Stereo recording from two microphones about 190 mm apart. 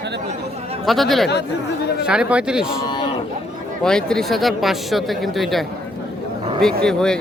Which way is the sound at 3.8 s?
5° left (ahead or behind).